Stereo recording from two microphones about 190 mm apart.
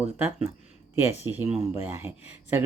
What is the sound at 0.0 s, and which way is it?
Speech, 5° right (ahead or behind).